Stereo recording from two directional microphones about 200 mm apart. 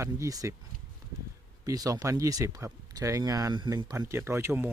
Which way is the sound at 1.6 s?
15° right (ahead or behind).